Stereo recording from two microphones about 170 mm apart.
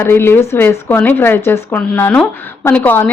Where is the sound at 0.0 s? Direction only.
15° left (ahead or behind).